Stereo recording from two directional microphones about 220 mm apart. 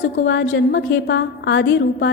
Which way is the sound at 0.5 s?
55° left (ahead or behind).